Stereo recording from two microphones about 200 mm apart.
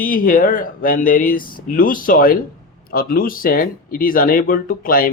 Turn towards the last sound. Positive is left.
turn(degrees=45)  # may be behind; listen again after turning